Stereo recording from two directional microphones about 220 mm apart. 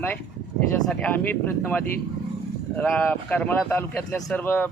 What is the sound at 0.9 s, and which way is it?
Speech, 5° left (ahead or behind).